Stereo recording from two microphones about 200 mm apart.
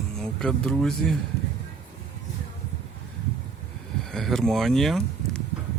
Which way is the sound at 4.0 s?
Centre (ahead or behind).